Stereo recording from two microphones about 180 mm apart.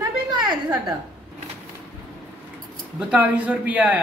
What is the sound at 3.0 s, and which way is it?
Speech, 5° right (ahead or behind).